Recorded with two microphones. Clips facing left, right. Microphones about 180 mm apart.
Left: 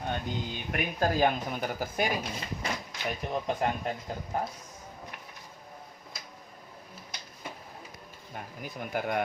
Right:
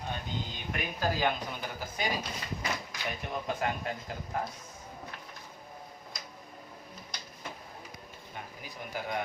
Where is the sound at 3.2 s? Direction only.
35° left (ahead or behind).